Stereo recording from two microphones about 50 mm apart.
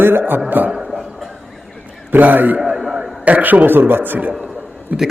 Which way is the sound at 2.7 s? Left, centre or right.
Centre.